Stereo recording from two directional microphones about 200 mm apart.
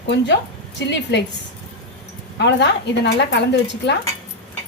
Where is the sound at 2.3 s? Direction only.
60° left (ahead or behind).